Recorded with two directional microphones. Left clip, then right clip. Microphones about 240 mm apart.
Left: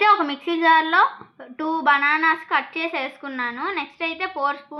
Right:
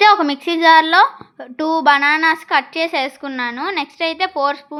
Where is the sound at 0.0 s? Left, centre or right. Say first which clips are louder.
Right 6 dB; right.